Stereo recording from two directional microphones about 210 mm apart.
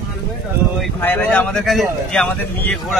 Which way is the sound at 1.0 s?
10° left (ahead or behind).